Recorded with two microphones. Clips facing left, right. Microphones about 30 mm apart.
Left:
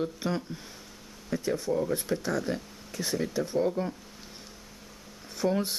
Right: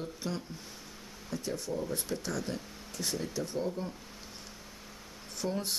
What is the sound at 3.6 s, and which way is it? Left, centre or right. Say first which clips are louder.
Speech: left 7 dB; left.